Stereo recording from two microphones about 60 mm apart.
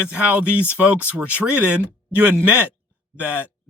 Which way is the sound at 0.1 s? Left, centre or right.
Centre.